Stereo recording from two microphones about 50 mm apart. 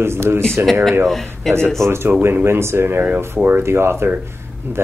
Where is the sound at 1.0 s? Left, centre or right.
Centre.